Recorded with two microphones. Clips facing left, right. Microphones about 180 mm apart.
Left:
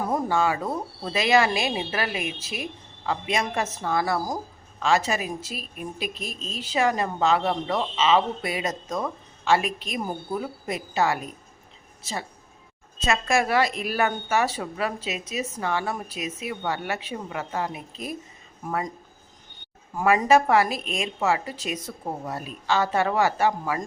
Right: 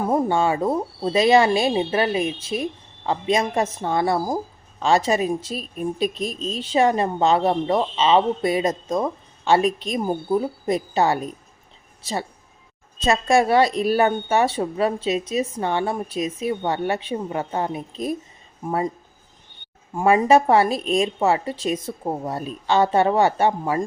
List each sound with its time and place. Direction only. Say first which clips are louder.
0.1 s a woman's voice: right 4 dB; 25° right (ahead or behind)
6.1 s a woman's voice: right 8 dB; 5° left (ahead or behind)
6.6 s a woman's voice: right 5 dB; 30° right (ahead or behind)
13.1 s speech: right 5 dB; 30° right (ahead or behind)
20.0 s speech: right 3 dB; 30° right (ahead or behind)